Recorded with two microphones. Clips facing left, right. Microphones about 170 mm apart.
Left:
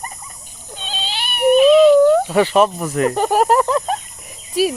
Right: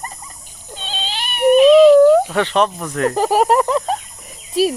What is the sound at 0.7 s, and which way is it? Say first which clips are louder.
Cat: even; 10° left (ahead or behind).